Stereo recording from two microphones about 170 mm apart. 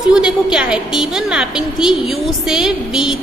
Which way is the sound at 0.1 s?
5° right (ahead or behind).